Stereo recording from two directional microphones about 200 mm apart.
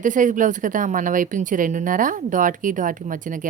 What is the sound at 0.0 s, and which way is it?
A woman's voice, 40° right (ahead or behind).